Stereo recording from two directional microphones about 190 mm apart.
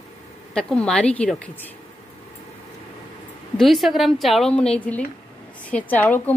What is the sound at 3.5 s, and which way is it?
A woman's voice, centre (ahead or behind).